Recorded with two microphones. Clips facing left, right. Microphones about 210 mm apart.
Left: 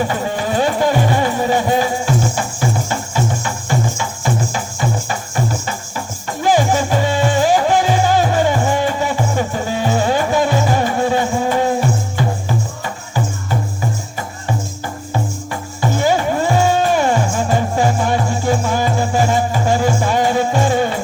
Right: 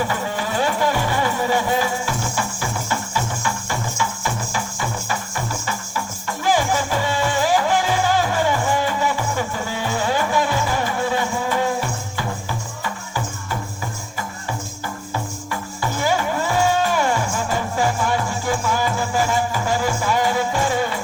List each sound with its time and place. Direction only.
0.0 s a sound: 25° left (ahead or behind)
0.8 s music: 20° left (ahead or behind)
6.2 s music: 20° left (ahead or behind)
15.8 s music: 25° left (ahead or behind)